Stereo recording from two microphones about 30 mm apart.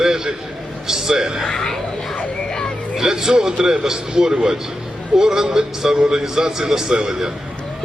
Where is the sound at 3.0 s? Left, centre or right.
Centre.